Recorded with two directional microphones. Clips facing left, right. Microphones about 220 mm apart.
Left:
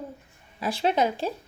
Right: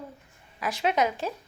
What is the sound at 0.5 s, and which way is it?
Speech, 30° left (ahead or behind).